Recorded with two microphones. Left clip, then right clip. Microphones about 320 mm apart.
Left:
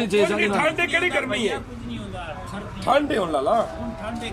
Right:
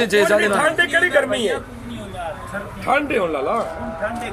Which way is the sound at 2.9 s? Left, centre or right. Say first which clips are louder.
Right 2 dB; left.